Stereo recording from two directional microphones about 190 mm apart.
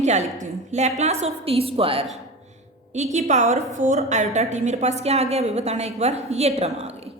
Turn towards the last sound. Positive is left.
turn(degrees=-35)  # may be behind; listen again after turning